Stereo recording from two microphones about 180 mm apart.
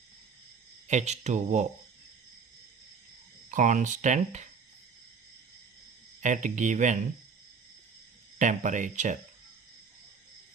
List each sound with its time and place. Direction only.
0.9 s speech: 40° right (ahead or behind)
3.5 s speech: 45° right (ahead or behind)
6.2 s speech: 45° right (ahead or behind)
8.4 s speech: 45° right (ahead or behind)